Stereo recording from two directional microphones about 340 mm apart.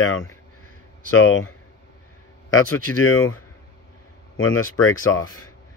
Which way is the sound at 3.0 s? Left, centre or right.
Left.